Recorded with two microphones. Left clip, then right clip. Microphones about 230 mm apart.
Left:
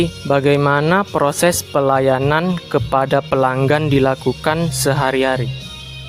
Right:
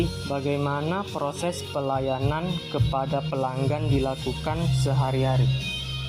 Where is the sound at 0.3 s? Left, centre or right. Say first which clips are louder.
Left 15 dB; left.